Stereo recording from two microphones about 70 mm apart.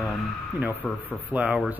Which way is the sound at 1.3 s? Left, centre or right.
Centre.